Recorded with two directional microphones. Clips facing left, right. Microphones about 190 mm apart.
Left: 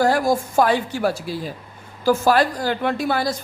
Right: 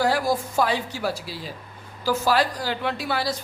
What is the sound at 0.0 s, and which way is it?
A woman's voice, 45° left (ahead or behind).